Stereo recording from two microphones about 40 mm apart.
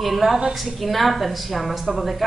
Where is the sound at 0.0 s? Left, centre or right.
Centre.